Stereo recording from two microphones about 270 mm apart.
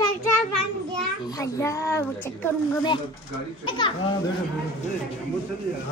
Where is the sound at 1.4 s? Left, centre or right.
Centre.